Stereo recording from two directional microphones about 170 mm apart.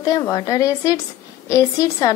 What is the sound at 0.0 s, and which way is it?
A woman's voice, 20° left (ahead or behind).